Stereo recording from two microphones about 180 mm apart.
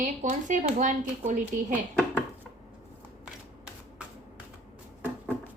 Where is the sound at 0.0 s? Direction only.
45° right (ahead or behind).